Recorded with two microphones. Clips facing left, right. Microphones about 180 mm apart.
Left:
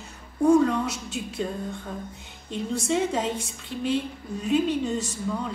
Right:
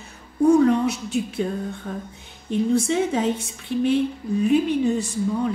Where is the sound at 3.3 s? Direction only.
60° right (ahead or behind).